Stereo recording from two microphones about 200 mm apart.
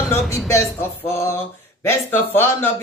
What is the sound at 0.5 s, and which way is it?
Speech, 15° left (ahead or behind).